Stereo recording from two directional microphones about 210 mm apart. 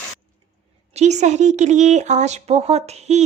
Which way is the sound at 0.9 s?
35° right (ahead or behind).